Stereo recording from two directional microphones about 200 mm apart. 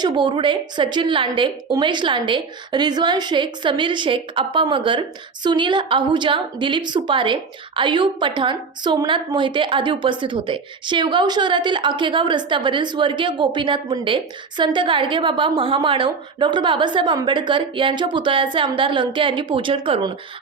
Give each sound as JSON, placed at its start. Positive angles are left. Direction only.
{"t": 0.0, "sound": "a woman's voice", "side_deg": -25}